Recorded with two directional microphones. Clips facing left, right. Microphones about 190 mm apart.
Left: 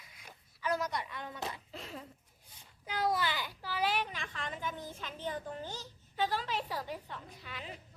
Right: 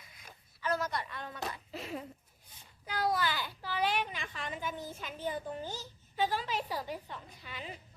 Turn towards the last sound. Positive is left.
turn(degrees=0)  # may be behind; listen again after turning